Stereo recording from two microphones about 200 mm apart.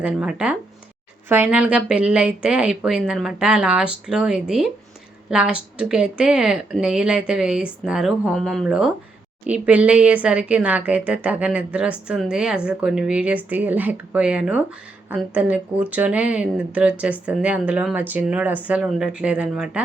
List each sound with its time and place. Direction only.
0.0 s a woman's voice: 5° right (ahead or behind)